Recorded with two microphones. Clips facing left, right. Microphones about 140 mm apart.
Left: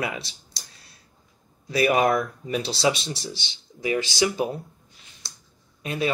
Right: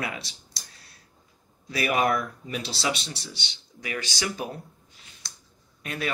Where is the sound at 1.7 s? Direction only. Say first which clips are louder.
Left 4 dB; 30° left (ahead or behind).